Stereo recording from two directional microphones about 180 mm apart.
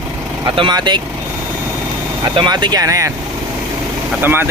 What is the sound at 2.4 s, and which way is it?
Speech, 25° right (ahead or behind).